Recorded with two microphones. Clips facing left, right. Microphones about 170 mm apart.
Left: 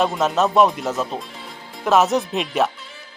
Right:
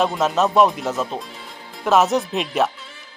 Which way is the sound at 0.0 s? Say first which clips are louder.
Even; centre (ahead or behind).